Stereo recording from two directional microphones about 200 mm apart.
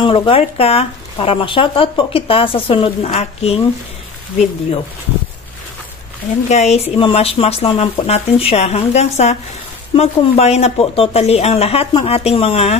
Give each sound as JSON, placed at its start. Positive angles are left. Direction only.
{"t": 0.0, "sound": "speech", "side_deg": 25}
{"t": 6.5, "sound": "speech", "side_deg": 35}